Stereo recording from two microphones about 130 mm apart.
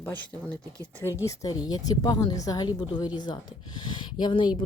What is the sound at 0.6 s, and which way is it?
Speech, 25° right (ahead or behind).